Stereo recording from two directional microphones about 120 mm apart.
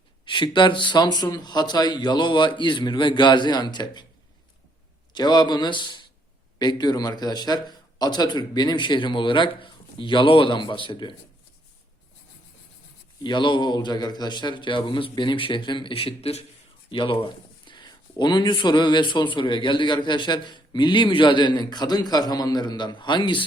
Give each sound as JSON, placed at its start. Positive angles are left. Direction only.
{"t": 0.3, "sound": "speech", "side_deg": 40}
{"t": 5.1, "sound": "speech", "side_deg": 35}
{"t": 13.2, "sound": "speech", "side_deg": 40}